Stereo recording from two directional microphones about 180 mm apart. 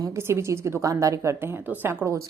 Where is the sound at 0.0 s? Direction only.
15° right (ahead or behind).